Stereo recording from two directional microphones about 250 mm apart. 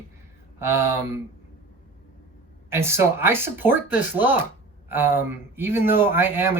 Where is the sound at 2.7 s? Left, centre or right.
Centre.